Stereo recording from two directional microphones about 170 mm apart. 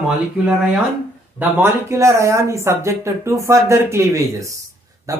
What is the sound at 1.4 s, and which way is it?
Speech, 15° right (ahead or behind).